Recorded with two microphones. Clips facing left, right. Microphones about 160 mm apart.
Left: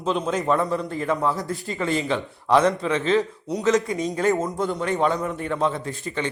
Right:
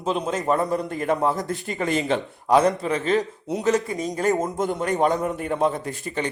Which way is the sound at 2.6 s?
35° right (ahead or behind).